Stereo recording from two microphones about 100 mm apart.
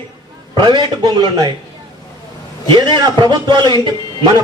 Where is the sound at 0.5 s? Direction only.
50° right (ahead or behind).